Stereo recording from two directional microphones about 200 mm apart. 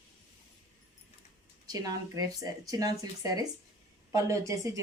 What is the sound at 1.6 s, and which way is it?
Speech, 20° right (ahead or behind).